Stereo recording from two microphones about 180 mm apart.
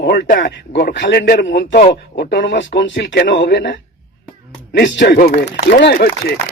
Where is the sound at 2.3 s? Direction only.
90° left; by 5.1 s 70° left (ahead or behind).